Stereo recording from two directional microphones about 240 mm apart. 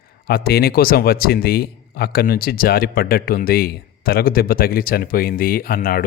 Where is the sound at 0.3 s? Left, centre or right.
Left.